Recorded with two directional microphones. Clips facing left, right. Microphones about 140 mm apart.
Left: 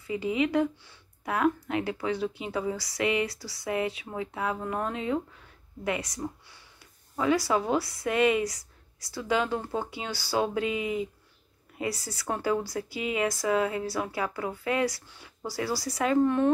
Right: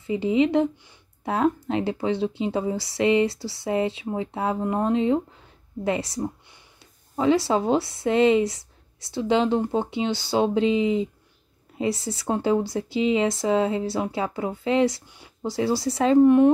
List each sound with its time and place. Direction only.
0.0 s speech: 25° right (ahead or behind)